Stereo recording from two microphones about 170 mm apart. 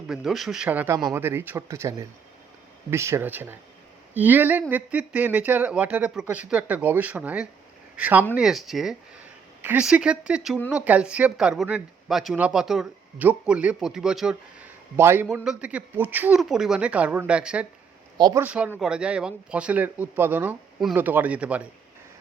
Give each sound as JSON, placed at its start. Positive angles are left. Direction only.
{"t": 0.1, "sound": "speech", "side_deg": 0}
{"t": 18.2, "sound": "speech", "side_deg": -25}
{"t": 18.4, "sound": "speech", "side_deg": -10}